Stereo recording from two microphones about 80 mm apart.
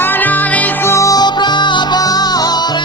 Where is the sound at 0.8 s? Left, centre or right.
Left.